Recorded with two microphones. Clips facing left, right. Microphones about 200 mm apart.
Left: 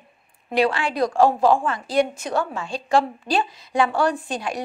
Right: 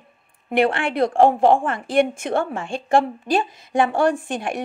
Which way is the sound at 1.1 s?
25° right (ahead or behind).